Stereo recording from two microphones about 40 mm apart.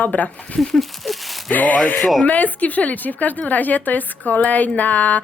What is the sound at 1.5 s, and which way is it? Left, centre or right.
Speech, left.